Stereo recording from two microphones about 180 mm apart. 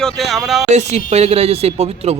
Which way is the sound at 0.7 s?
40° right (ahead or behind).